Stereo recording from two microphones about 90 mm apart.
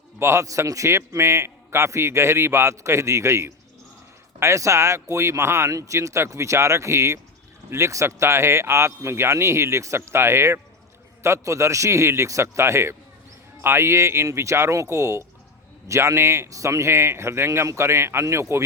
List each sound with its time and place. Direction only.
0.2 s a man's voice: 30° right (ahead or behind)